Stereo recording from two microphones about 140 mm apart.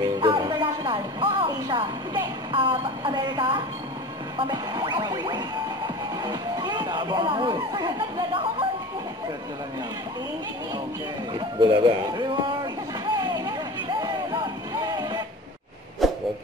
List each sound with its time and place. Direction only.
0.1 s music: 30° right (ahead or behind)
0.5 s a woman's voice: 35° right (ahead or behind)
11.3 s speech: 35° right (ahead or behind)
13.1 s vehicle: 30° right (ahead or behind)
14.0 s music: 30° right (ahead or behind)
16.0 s a sound: centre (ahead or behind)